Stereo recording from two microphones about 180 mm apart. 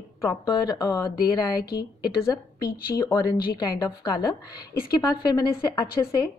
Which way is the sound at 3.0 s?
20° left (ahead or behind).